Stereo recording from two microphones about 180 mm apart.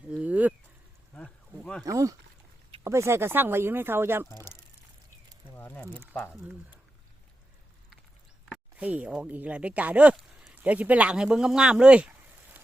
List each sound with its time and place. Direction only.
0.1 s a sound: 5° right (ahead or behind)
1.1 s a sound: 5° left (ahead or behind)
1.8 s speech: 20° right (ahead or behind)
5.5 s ratchet: 10° left (ahead or behind)
6.1 s speech: 5° left (ahead or behind)
8.8 s speech: 5° right (ahead or behind)